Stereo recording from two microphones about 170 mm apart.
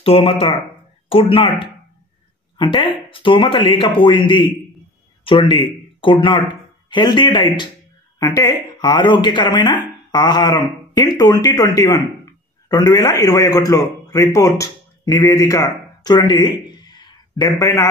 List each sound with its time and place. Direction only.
0.0 s speech: 35° left (ahead or behind)
13.2 s speech: 20° left (ahead or behind)